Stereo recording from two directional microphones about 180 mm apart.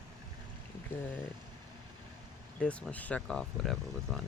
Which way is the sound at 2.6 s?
5° left (ahead or behind).